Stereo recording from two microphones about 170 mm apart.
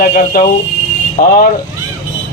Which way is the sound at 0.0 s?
60° left (ahead or behind).